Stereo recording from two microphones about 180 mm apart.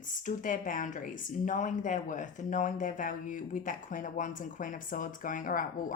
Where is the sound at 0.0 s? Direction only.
45° left (ahead or behind).